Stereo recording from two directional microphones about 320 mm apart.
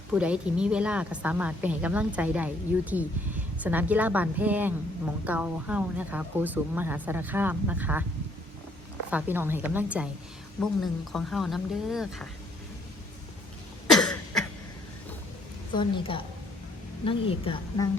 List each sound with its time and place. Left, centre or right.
0.1 s a woman's voice: centre
9.0 s a woman's voice: centre
13.9 s cough: centre
15.7 s a woman's voice: centre